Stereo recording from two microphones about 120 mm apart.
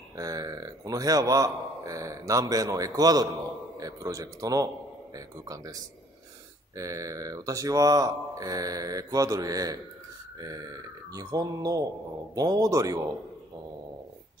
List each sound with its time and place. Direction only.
0.1 s a man's voice: 30° right (ahead or behind)
3.8 s mantra: 30° right (ahead or behind)
10.4 s speech: 30° right (ahead or behind)